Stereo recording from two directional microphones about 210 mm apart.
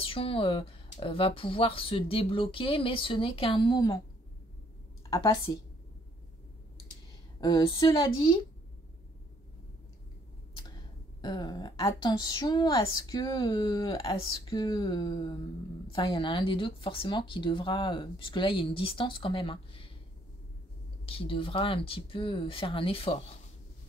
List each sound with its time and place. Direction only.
0.0 s speech: 25° left (ahead or behind)
5.1 s a woman's voice: 15° left (ahead or behind)
7.3 s speech: 20° left (ahead or behind)
11.1 s speech: 20° left (ahead or behind)
21.0 s speech: 25° left (ahead or behind)